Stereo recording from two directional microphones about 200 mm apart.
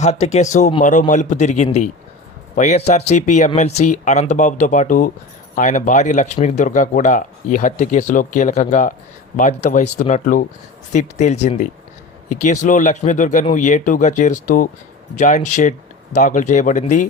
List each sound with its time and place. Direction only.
0.0 s speech: 35° left (ahead or behind)